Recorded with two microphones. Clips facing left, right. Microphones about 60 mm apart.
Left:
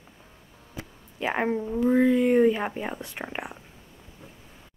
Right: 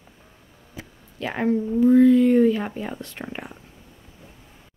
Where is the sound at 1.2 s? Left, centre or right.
Left.